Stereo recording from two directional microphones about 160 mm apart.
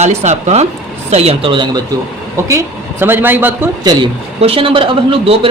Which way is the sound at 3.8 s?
25° right (ahead or behind).